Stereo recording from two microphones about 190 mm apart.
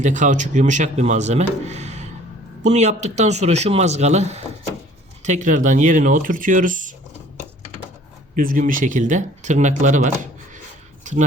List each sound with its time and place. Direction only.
0.0 s speech: 40° right (ahead or behind)
8.4 s speech: 45° right (ahead or behind)
11.0 s a sound: 40° right (ahead or behind)